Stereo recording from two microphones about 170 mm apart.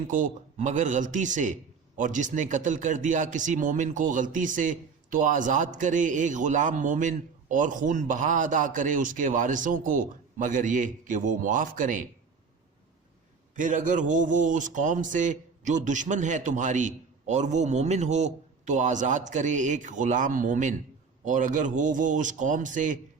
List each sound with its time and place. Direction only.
0.1 s speech: 50° right (ahead or behind)
13.6 s speech: 50° right (ahead or behind)